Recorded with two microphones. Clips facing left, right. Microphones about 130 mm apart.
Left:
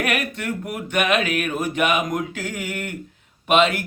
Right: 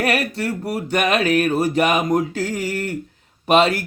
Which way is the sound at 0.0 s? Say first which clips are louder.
Right 4 dB; 35° right (ahead or behind).